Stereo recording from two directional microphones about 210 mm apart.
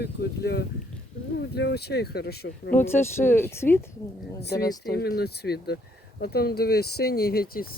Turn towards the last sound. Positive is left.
turn(degrees=45)  # may be behind; listen again after turning